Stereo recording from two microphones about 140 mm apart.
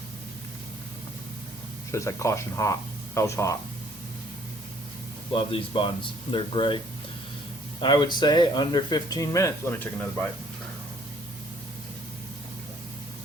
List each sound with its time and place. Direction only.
1.9 s speech: 20° left (ahead or behind)
5.3 s speech: 40° left (ahead or behind)
7.8 s speech: 35° left (ahead or behind); by 10.2 s 15° left (ahead or behind)